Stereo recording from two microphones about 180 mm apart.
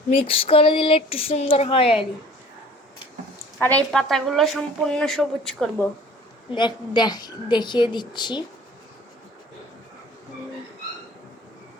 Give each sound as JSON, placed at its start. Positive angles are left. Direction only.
{"t": 0.2, "sound": "speech", "side_deg": 30}
{"t": 3.0, "sound": "a sound", "side_deg": 20}
{"t": 3.7, "sound": "speech", "side_deg": 5}
{"t": 6.5, "sound": "a woman's voice", "side_deg": 25}